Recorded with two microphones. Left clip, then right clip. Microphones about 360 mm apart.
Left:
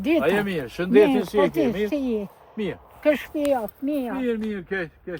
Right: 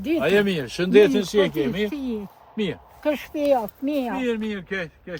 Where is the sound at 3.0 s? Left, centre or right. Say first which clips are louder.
Left 2 dB; right.